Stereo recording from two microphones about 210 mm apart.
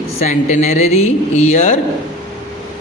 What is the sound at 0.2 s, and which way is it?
A woman's voice, 35° left (ahead or behind).